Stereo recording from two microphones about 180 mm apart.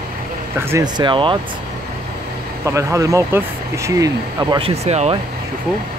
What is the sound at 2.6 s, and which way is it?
Speech, 15° right (ahead or behind).